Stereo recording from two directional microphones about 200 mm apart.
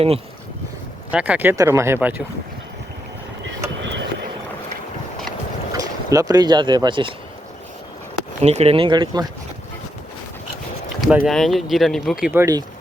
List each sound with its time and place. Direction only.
1.1 s speech: 5° right (ahead or behind)
3.8 s vehicle: 65° right (ahead or behind)
5.7 s speech: 15° right (ahead or behind)
8.4 s speech: 35° right (ahead or behind)
11.0 s speech: 5° right (ahead or behind)